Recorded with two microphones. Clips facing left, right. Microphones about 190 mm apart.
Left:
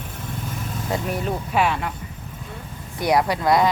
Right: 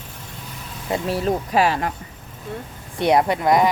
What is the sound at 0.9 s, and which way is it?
Speech, 30° right (ahead or behind).